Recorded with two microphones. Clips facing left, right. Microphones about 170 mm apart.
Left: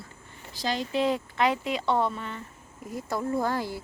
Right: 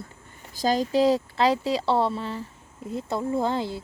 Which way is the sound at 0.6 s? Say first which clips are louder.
Right 6 dB; 40° right (ahead or behind).